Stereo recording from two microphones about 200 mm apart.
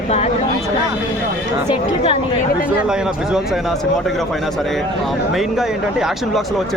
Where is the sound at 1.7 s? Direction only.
25° left (ahead or behind).